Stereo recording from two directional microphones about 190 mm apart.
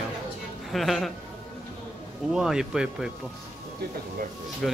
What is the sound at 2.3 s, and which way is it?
Speech, 5° right (ahead or behind).